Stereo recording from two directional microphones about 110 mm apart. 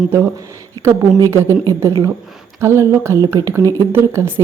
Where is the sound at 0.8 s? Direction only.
35° right (ahead or behind).